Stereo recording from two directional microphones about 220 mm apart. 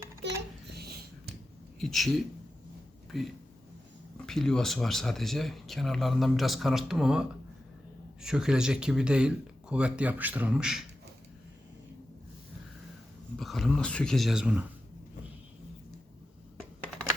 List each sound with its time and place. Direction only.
0.2 s a sound: 55° right (ahead or behind)
1.8 s speech: centre (ahead or behind)
13.4 s speech: centre (ahead or behind)